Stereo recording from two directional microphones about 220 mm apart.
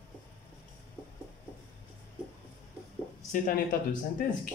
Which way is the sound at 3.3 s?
40° left (ahead or behind).